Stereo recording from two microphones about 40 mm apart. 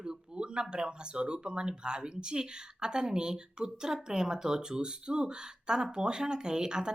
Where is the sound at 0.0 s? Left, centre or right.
Right.